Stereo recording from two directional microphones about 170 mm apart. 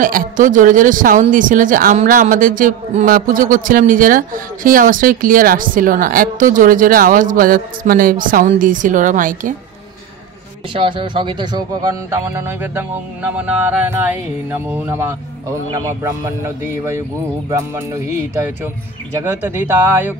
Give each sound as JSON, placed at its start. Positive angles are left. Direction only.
{"t": 0.0, "sound": "a man's voice", "side_deg": -55}
{"t": 10.7, "sound": "speech", "side_deg": -30}